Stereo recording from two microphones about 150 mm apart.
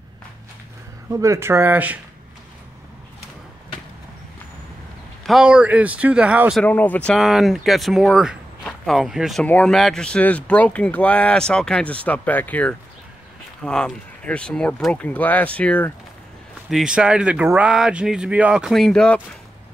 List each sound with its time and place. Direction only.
1.1 s speech: 20° right (ahead or behind)
5.2 s speech: 5° right (ahead or behind)
6.6 s speech: 10° left (ahead or behind)
16.7 s speech: 5° right (ahead or behind)